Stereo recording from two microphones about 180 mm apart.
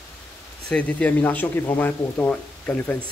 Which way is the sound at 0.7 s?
5° left (ahead or behind).